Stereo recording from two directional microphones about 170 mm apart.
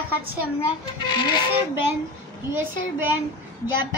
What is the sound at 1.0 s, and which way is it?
Speech, 25° left (ahead or behind).